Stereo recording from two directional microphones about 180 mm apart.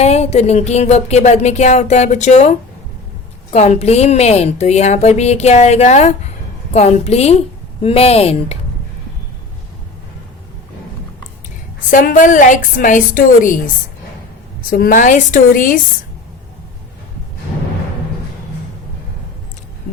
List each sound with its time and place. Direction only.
0.0 s speech: 35° left (ahead or behind)
11.9 s a woman's voice: 45° left (ahead or behind)
14.7 s a woman's voice: 50° left (ahead or behind)